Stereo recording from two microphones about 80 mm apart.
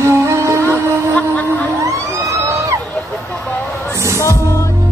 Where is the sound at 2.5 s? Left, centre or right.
Right.